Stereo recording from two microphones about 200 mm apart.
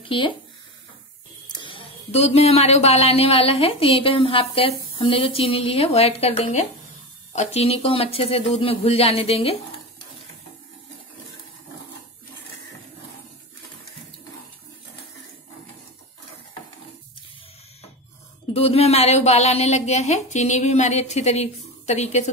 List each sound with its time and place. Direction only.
0.1 s speech: 25° left (ahead or behind)
1.5 s speech: 25° left (ahead or behind)
18.5 s a woman's voice: 30° left (ahead or behind)